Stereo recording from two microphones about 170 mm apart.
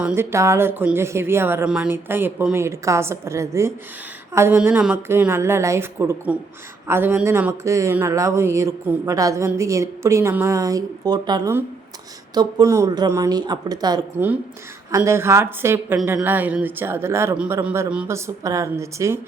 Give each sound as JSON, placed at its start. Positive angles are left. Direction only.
{"t": 0.0, "sound": "speech", "side_deg": -10}
{"t": 18.4, "sound": "speech", "side_deg": -20}